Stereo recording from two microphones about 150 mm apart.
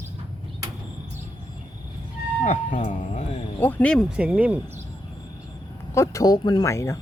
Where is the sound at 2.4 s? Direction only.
50° left (ahead or behind).